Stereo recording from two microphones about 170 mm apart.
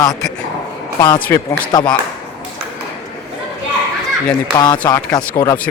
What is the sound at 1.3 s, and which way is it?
Speech, 20° left (ahead or behind).